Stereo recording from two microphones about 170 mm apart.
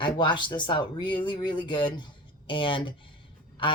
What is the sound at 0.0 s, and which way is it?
Speech, 25° left (ahead or behind).